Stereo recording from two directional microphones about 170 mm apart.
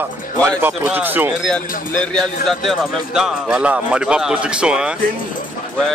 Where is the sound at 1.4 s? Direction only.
5° left (ahead or behind).